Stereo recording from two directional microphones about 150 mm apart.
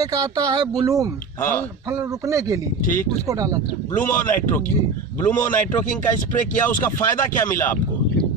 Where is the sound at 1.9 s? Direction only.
20° right (ahead or behind).